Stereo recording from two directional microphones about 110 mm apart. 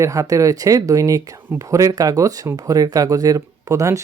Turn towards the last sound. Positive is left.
turn(degrees=-30)  # may be behind; listen again after turning